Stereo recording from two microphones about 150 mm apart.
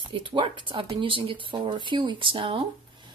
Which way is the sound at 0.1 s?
35° right (ahead or behind).